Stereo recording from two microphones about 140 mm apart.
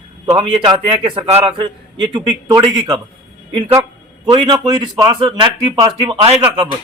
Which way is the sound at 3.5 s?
40° right (ahead or behind).